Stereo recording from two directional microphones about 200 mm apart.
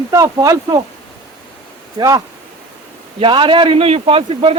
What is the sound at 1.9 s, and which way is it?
A man's voice, 20° right (ahead or behind).